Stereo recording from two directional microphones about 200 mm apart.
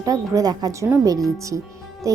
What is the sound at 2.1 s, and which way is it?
Music, 15° right (ahead or behind).